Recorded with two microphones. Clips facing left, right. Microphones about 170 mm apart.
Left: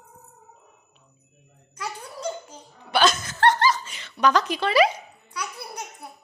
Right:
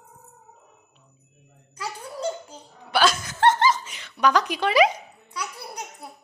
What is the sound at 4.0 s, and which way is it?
Speech, 10° right (ahead or behind).